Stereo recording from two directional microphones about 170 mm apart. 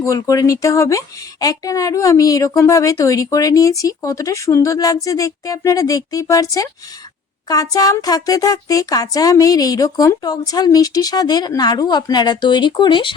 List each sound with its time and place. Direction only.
0.0 s speech: 20° left (ahead or behind)